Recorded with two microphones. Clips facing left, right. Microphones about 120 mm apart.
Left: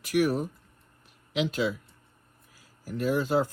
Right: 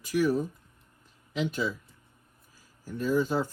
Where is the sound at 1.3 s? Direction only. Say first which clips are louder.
Left 2 dB; 90° left.